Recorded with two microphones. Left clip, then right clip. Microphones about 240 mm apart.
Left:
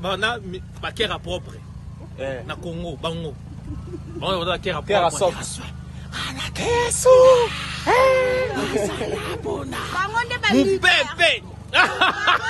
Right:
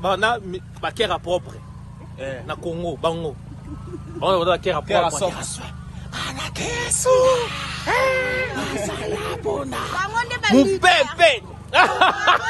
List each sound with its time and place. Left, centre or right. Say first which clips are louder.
0.0 s speech: right 4 dB; centre
2.1 s speech: left 2 dB; left
2.4 s speech: right 4 dB; centre
4.8 s speech: left 4 dB; left
5.3 s speech: right 1 dB; centre
6.7 s speech: left 8 dB; left
7.2 s speech: left 4 dB; centre
7.9 s a sound: left 3 dB; left
8.5 s speech: left 2 dB; centre
9.9 s speech: left 1 dB; left
11.1 s speech: right 3 dB; centre